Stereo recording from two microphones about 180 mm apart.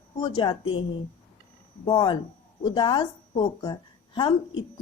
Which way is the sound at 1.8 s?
25° left (ahead or behind).